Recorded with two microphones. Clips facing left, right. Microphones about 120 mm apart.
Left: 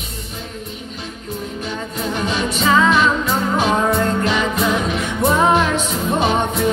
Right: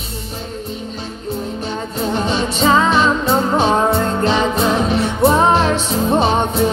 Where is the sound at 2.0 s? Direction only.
30° right (ahead or behind).